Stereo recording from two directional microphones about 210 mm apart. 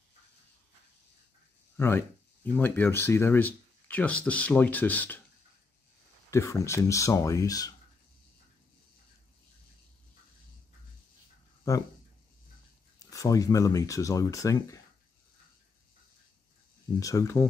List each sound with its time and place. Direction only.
1.8 s speech: 10° left (ahead or behind)
6.3 s speech: 15° left (ahead or behind)
13.1 s speech: 15° left (ahead or behind)
17.0 s speech: 15° left (ahead or behind)